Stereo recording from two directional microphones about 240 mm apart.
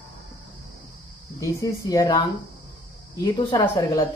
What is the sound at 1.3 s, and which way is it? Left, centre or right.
Speech, centre.